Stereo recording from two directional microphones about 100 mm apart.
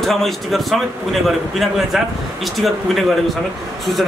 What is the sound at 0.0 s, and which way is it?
A man's voice, centre (ahead or behind).